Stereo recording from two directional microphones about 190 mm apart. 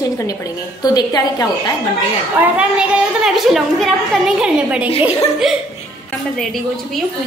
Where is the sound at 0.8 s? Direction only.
20° left (ahead or behind).